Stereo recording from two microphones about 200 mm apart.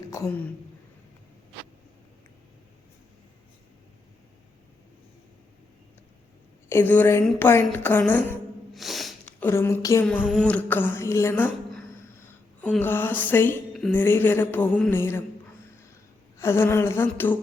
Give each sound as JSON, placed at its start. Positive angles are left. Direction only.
{"t": 0.1, "sound": "a woman's voice", "side_deg": 15}
{"t": 6.7, "sound": "a woman's voice", "side_deg": 10}
{"t": 12.6, "sound": "speech", "side_deg": 10}
{"t": 16.4, "sound": "speech", "side_deg": 10}